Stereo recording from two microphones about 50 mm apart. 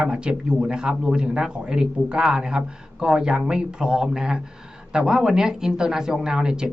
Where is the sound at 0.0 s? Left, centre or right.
Centre.